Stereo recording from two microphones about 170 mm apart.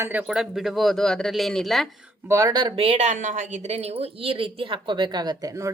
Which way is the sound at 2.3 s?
20° right (ahead or behind).